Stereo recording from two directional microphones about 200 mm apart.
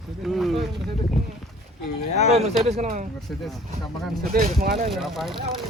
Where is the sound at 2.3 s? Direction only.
30° right (ahead or behind).